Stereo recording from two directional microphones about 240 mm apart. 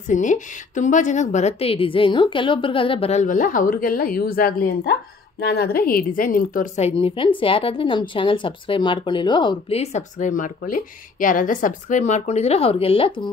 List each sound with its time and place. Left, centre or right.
0.1 s a woman's voice: left